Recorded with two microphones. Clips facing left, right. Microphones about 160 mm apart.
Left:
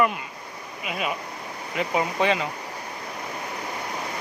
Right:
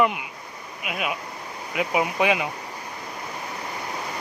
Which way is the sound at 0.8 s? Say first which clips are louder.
Even; 5° right (ahead or behind).